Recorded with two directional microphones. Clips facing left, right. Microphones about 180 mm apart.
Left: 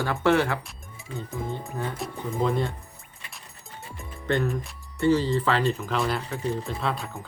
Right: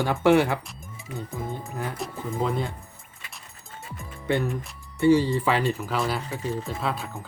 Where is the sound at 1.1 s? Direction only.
Centre (ahead or behind).